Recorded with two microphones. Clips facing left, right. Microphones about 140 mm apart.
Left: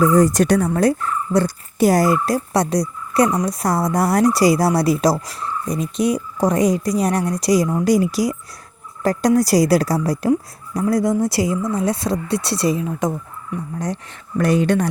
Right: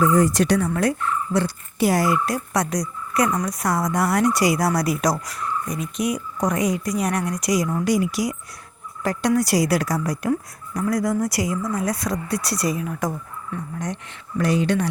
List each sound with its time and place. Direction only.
0.0 s speech: 35° left (ahead or behind)
13.7 s speech: 35° left (ahead or behind)
14.3 s speech: 50° left (ahead or behind)